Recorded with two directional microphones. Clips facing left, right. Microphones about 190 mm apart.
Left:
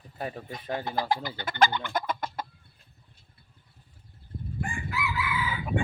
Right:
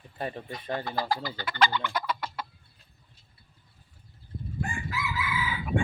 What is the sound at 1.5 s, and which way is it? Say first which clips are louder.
Chicken: left 2 dB; 50° left (ahead or behind).